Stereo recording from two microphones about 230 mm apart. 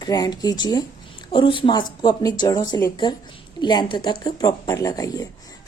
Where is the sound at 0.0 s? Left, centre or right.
Centre.